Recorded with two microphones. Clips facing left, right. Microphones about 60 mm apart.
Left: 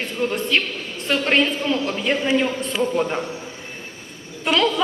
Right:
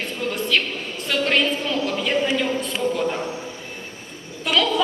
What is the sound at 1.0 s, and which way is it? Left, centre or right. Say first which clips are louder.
A woman's voice: left 2 dB; left.